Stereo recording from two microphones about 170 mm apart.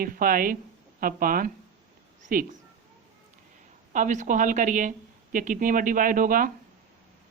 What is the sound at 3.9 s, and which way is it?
Speech, 50° right (ahead or behind).